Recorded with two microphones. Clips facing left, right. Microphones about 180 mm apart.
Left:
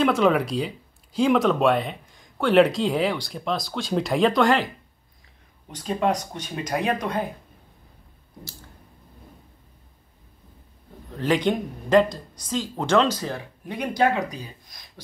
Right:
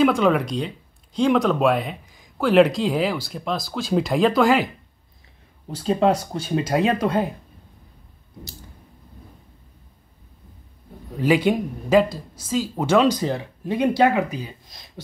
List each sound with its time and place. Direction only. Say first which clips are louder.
0.0 s speech: right 2 dB; centre (ahead or behind)
5.7 s speech: right 5 dB; 30° right (ahead or behind)
11.1 s speech: right 3 dB; 10° right (ahead or behind)
14.2 s speech: right 3 dB; 5° right (ahead or behind)
14.7 s a sound: right 3 dB; 25° right (ahead or behind)